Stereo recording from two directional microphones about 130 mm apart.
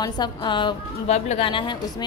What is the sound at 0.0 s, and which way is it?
Speech, 35° left (ahead or behind).